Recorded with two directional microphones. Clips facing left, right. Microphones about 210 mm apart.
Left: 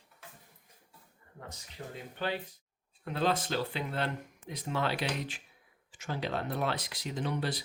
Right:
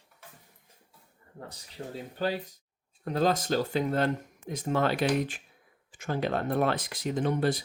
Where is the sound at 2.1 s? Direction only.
40° right (ahead or behind).